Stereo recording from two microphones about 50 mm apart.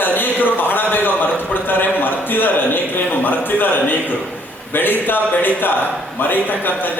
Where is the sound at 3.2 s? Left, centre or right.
Left.